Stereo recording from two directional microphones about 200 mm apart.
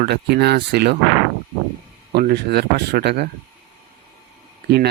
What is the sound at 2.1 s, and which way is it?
Speech, 55° right (ahead or behind).